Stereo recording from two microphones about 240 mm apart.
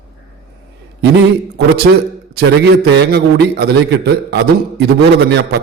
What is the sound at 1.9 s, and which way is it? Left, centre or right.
A man's voice, right.